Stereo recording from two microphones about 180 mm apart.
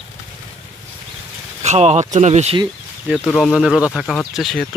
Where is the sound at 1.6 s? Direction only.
40° right (ahead or behind).